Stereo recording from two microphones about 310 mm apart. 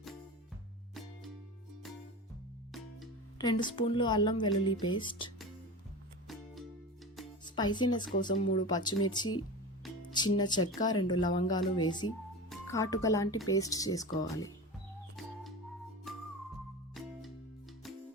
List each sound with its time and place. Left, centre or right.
3.3 s speech: centre
6.2 s music: centre
7.4 s speech: centre
10.3 s speech: centre
16.1 s music: centre